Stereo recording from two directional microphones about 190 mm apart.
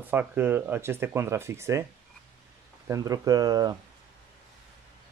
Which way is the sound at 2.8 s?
15° right (ahead or behind).